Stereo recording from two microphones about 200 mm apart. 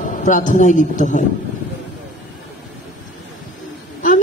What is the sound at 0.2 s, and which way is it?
A woman's voice, 40° left (ahead or behind).